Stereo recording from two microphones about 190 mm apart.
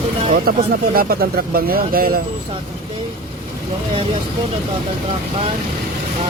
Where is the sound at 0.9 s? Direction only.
50° right (ahead or behind).